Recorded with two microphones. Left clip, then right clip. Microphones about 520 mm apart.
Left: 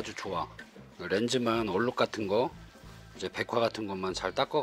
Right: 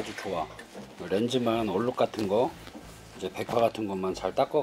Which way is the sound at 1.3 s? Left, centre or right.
Left.